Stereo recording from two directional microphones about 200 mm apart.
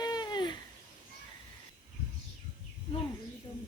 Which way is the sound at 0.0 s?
20° left (ahead or behind).